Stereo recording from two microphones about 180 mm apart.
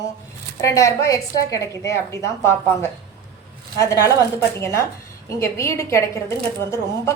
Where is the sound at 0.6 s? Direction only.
15° left (ahead or behind).